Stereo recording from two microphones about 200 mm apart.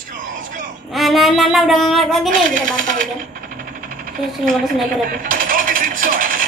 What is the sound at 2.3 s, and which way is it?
Speech, 40° right (ahead or behind).